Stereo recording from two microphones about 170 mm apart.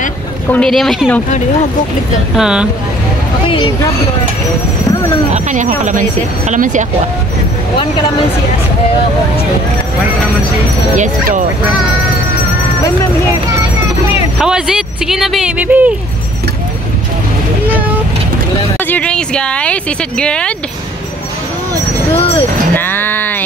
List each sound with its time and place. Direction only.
0.5 s speech: 5° left (ahead or behind)
2.3 s speech: 5° right (ahead or behind)
3.4 s speech: 30° left (ahead or behind)
5.3 s speech: 45° right (ahead or behind)
11.0 s speech: 50° right (ahead or behind)
14.4 s speech: 5° right (ahead or behind)
18.8 s speech: 10° left (ahead or behind)
22.1 s speech: 35° left (ahead or behind)
22.8 s a sound: 10° left (ahead or behind)